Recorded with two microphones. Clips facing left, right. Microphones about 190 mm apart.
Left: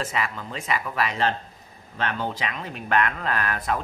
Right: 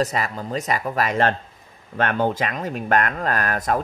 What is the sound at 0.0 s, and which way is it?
Speech, 40° right (ahead or behind).